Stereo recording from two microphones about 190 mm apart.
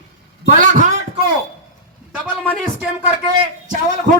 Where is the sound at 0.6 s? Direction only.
40° right (ahead or behind).